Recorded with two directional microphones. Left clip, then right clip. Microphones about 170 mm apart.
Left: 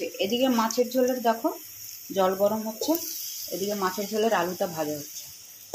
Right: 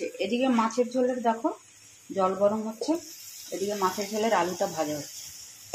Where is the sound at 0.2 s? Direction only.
5° left (ahead or behind).